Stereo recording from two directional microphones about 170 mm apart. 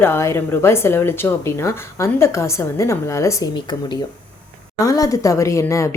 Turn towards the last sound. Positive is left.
turn(degrees=15)  # may be behind; listen again after turning